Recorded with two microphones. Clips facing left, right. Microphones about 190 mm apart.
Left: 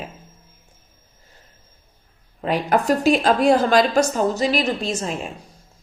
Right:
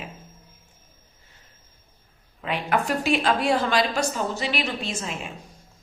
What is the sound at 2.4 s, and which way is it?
A woman's voice, 40° left (ahead or behind).